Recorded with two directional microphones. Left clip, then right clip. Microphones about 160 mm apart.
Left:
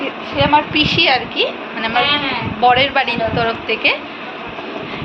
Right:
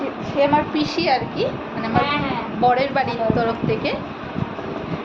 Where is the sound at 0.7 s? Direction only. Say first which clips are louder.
Left 6 dB; 5° right (ahead or behind).